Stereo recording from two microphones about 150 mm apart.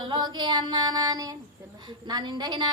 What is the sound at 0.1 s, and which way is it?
Speech, 30° right (ahead or behind).